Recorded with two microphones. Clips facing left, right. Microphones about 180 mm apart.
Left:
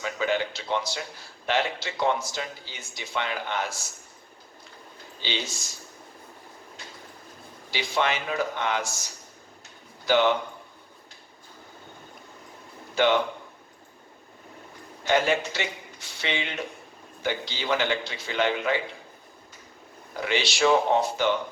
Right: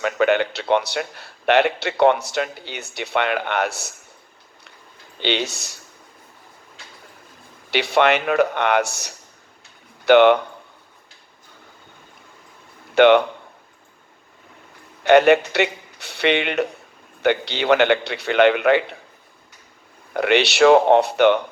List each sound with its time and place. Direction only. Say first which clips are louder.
0.0 s a man's voice: right 8 dB; 65° right (ahead or behind)
5.2 s a man's voice: right 10 dB; 65° right (ahead or behind)
7.7 s a man's voice: right 9 dB; 70° right (ahead or behind)
12.9 s speech: right 9 dB; 65° right (ahead or behind)
15.0 s a man's voice: right 10 dB; 65° right (ahead or behind)
20.1 s a man's voice: right 10 dB; 70° right (ahead or behind)